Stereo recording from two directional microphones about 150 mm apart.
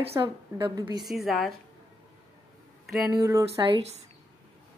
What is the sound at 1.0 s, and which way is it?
Speech, centre (ahead or behind).